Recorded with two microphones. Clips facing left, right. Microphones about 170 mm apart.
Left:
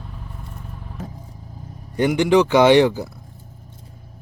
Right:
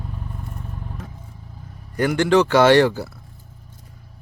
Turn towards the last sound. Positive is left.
turn(degrees=15)  # may be behind; listen again after turning